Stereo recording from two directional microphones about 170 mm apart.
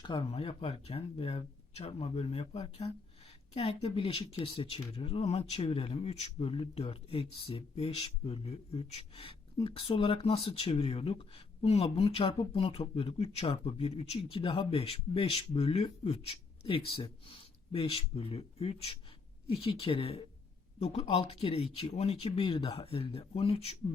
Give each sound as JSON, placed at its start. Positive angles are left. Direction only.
{"t": 0.0, "sound": "speech", "side_deg": 30}